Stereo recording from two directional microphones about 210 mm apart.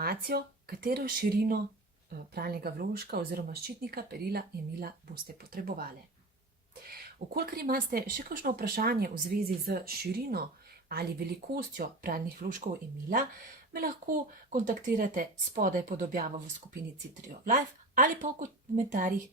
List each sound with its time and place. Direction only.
0.0 s speech: 45° right (ahead or behind)
6.9 s speech: 45° right (ahead or behind)
11.5 s speech: 45° right (ahead or behind)